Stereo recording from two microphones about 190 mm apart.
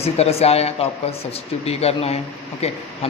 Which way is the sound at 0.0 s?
30° left (ahead or behind).